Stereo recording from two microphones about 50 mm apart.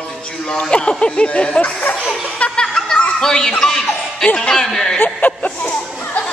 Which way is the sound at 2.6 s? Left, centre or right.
Centre.